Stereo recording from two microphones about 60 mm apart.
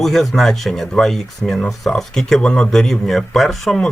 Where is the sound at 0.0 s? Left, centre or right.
Centre.